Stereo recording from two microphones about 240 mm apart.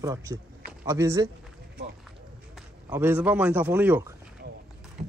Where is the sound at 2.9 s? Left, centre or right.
Centre.